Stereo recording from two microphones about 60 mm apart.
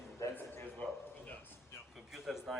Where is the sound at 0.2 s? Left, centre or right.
Left.